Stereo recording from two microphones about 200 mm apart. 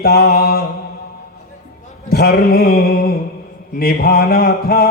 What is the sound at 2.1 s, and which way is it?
A man's voice, 50° left (ahead or behind).